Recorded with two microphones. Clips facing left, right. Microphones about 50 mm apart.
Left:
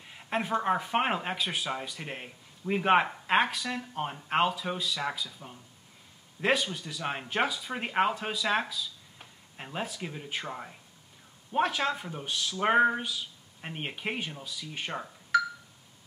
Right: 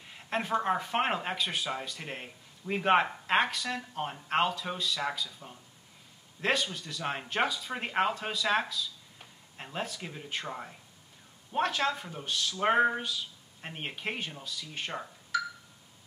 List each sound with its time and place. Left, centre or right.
0.0 s speech: centre